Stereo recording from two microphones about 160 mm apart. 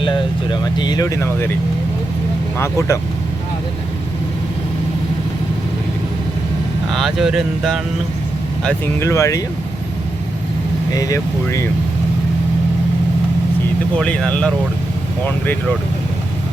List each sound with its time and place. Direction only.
0.0 s speech: 30° left (ahead or behind)
2.6 s speech: 20° left (ahead or behind)
6.9 s speech: centre (ahead or behind)
9.0 s speech: 20° left (ahead or behind)
10.9 s speech: 20° left (ahead or behind)
14.0 s speech: 5° left (ahead or behind)